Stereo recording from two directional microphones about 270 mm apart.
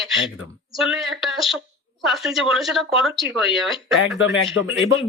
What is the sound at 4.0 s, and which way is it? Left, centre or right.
Speech, left.